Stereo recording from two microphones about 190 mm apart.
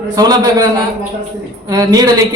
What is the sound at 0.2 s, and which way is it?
Speech, 20° right (ahead or behind).